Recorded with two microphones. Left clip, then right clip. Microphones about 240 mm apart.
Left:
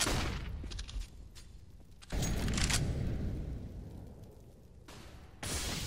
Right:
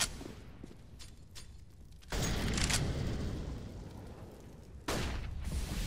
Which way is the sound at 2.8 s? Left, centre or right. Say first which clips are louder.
Right 2 dB; right.